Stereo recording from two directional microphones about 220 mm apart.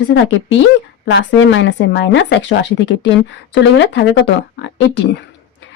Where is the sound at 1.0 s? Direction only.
60° left (ahead or behind).